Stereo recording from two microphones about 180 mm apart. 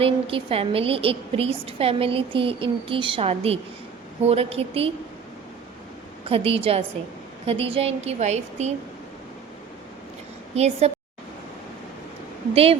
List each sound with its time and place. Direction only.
0.0 s a woman's voice: 30° right (ahead or behind)
6.2 s a woman's voice: 30° right (ahead or behind)
10.5 s a woman's voice: 35° right (ahead or behind)